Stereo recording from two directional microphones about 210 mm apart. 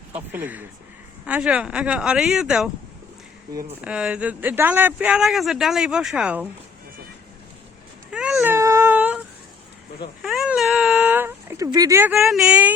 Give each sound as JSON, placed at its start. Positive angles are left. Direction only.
{"t": 0.1, "sound": "speech", "side_deg": -10}
{"t": 3.8, "sound": "speech", "side_deg": -5}
{"t": 8.1, "sound": "baby cry", "side_deg": -5}
{"t": 10.2, "sound": "a sound", "side_deg": -5}
{"t": 12.3, "sound": "speech", "side_deg": 0}